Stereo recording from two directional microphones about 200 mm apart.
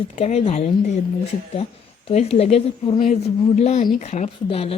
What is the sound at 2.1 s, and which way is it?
A woman's voice, 30° left (ahead or behind).